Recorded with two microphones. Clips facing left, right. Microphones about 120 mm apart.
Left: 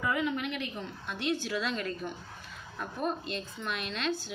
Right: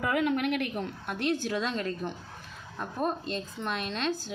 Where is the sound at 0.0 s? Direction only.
60° right (ahead or behind).